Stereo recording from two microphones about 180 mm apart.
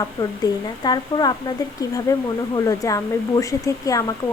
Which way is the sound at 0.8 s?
25° left (ahead or behind).